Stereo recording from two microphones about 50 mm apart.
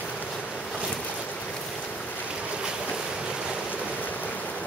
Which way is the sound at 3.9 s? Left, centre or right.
Left.